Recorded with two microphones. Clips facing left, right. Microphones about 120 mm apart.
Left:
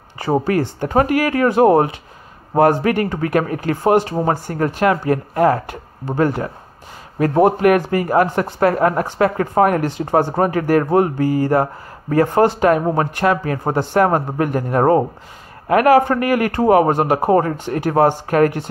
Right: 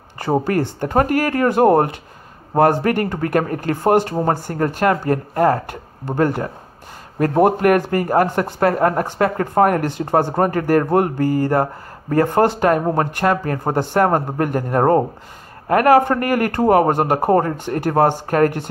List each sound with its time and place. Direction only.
0.5 s speech: 50° right (ahead or behind)